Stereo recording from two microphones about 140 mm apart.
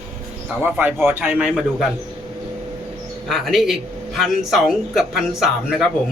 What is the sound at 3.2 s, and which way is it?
Speech, centre (ahead or behind).